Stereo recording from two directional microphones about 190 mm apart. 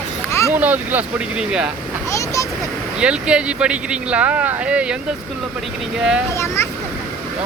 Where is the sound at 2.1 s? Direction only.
15° left (ahead or behind).